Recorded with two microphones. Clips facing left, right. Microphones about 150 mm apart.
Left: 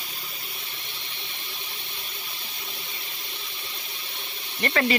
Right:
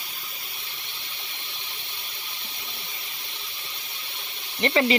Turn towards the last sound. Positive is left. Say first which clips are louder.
# right 2 dB
turn(degrees=-20)  # may be behind; listen again after turning